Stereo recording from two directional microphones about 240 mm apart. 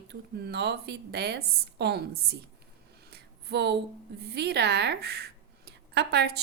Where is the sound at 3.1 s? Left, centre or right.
Right.